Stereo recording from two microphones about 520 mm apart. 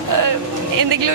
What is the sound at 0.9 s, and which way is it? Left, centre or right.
Speech, right.